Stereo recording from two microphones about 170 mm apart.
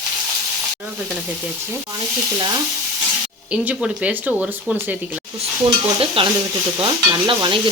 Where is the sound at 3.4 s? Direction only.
5° right (ahead or behind).